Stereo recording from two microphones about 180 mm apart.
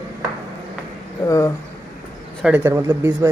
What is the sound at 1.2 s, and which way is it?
Speech, 15° left (ahead or behind).